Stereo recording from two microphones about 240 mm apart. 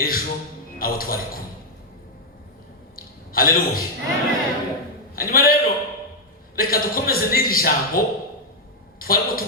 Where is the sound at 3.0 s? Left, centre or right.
Left.